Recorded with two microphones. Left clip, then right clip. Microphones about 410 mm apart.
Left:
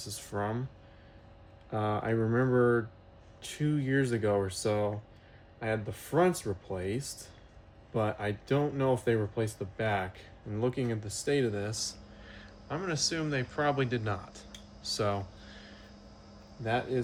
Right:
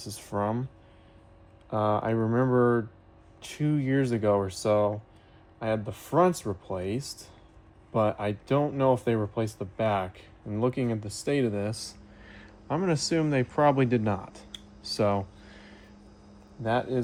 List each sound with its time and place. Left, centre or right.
0.3 s speech: centre
1.7 s speech: centre
14.8 s a sound: centre
16.6 s speech: centre